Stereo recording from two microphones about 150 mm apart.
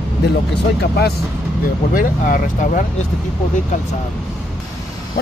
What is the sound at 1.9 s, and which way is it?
Speech, 65° left (ahead or behind).